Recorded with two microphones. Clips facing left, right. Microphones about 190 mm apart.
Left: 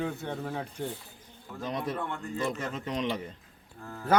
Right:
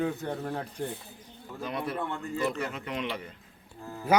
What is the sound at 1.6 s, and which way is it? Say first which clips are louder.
Speech: left 1 dB; 20° left (ahead or behind).